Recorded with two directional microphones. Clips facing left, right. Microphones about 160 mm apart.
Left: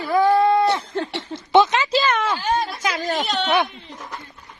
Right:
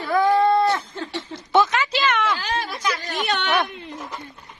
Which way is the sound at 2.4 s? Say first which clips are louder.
Left 5 dB; 90° right.